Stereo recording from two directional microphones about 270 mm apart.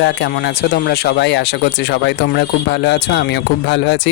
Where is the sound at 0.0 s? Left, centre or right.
Left.